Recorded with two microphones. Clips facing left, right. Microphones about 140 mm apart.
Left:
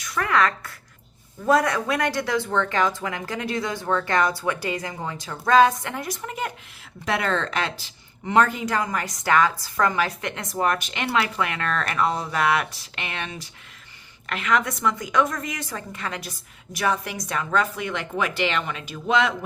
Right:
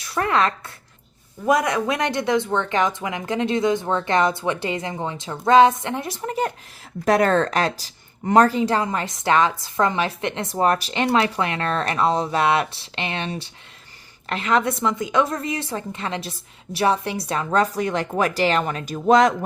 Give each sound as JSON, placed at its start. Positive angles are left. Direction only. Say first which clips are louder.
{"t": 0.0, "sound": "a woman's voice", "louder": "right 2 dB", "side_deg": -30}
{"t": 7.0, "sound": "a woman's voice", "louder": "right 7 dB", "side_deg": -45}